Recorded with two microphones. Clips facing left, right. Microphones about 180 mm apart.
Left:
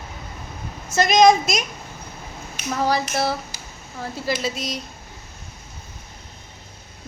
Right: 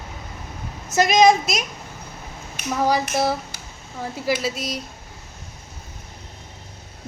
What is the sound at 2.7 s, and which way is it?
Speech, 15° right (ahead or behind).